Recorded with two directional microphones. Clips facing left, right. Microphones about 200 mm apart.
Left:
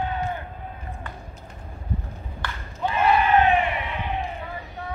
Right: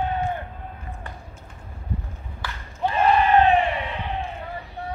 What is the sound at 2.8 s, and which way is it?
Crowd, 30° right (ahead or behind).